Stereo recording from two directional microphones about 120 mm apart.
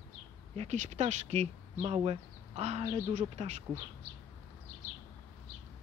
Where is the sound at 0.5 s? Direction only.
80° right.